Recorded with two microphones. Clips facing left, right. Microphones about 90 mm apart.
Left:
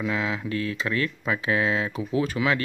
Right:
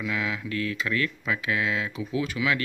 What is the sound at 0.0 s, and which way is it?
Speech, 30° left (ahead or behind).